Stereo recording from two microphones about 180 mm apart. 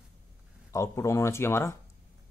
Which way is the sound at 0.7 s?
15° left (ahead or behind).